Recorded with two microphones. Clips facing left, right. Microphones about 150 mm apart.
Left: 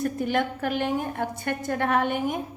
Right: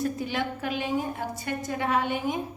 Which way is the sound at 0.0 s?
55° left (ahead or behind).